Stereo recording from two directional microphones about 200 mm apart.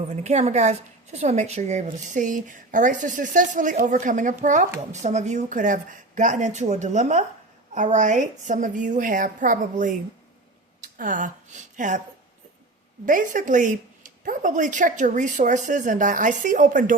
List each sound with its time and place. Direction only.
0.1 s a woman's voice: 35° right (ahead or behind)
13.1 s a woman's voice: 40° right (ahead or behind)